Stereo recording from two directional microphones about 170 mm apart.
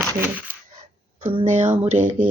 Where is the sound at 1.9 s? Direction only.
50° right (ahead or behind).